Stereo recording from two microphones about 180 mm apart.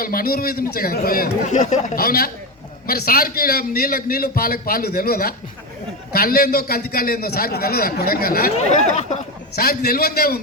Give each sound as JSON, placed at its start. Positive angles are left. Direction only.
{"t": 0.0, "sound": "a man's voice", "side_deg": 55}
{"t": 2.0, "sound": "a man's voice", "side_deg": 55}
{"t": 8.9, "sound": "speech", "side_deg": 40}
{"t": 9.6, "sound": "a man's voice", "side_deg": 55}